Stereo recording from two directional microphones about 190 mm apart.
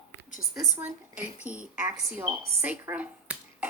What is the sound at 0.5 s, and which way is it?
A woman's voice, centre (ahead or behind).